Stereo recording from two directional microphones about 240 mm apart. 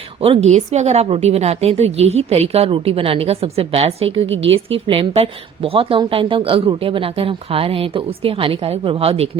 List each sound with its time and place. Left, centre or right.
0.2 s a woman's voice: right
4.3 s a woman's voice: right
4.5 s a woman's voice: right